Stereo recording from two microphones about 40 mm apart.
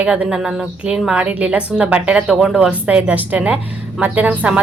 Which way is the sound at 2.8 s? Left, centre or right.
Right.